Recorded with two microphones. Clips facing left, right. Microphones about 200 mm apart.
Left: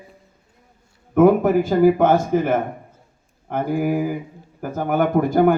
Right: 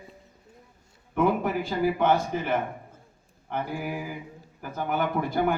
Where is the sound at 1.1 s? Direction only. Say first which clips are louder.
Left 11 dB; 45° left (ahead or behind).